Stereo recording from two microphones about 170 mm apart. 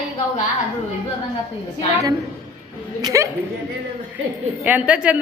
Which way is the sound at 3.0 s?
20° right (ahead or behind).